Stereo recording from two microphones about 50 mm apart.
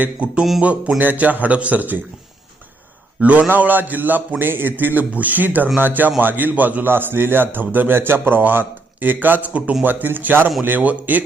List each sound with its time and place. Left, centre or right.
0.0 s music: right
0.9 s a man's voice: right
3.2 s a man's voice: right
3.5 s a man's voice: right
9.5 s music: right
9.8 s a man's voice: right